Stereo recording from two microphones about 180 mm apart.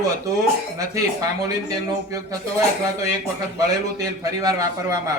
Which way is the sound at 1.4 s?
20° right (ahead or behind).